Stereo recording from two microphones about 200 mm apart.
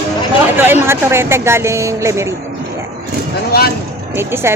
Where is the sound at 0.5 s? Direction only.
10° right (ahead or behind).